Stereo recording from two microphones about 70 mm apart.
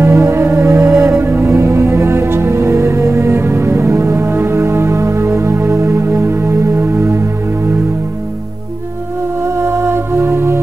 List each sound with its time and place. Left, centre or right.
0.0 s music: right
9.6 s music: right